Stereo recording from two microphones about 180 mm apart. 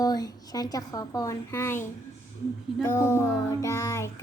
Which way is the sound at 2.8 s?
15° left (ahead or behind).